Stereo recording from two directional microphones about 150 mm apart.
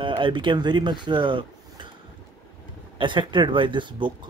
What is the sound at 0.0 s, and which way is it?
Speech, 30° right (ahead or behind).